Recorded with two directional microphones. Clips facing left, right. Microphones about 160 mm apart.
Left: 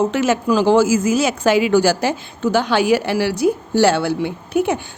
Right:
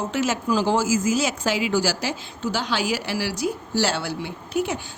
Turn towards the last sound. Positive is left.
turn(degrees=55)  # may be behind; listen again after turning